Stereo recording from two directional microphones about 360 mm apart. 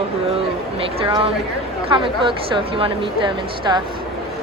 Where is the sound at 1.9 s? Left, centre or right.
Centre.